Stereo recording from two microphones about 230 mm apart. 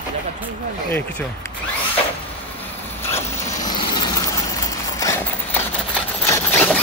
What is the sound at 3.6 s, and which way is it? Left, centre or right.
Vehicle, centre.